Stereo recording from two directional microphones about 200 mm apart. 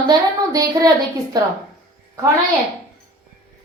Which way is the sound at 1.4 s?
20° right (ahead or behind).